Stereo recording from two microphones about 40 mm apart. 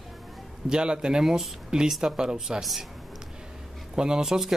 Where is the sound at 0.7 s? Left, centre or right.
Right.